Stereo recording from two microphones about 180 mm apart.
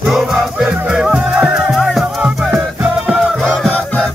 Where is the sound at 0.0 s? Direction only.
Centre (ahead or behind).